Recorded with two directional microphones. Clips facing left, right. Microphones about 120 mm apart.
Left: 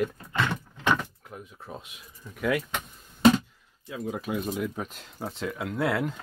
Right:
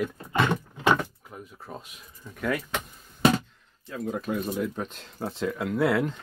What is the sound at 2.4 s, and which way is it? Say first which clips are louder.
Speech: left 1 dB; 5° left (ahead or behind).